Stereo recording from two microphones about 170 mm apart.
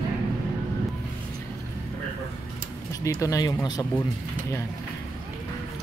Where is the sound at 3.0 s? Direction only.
20° left (ahead or behind).